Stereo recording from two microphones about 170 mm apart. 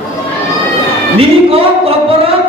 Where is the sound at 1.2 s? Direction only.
35° right (ahead or behind).